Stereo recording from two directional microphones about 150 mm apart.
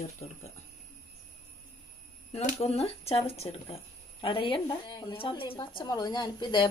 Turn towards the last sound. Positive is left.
turn(degrees=30)  # may be behind; listen again after turning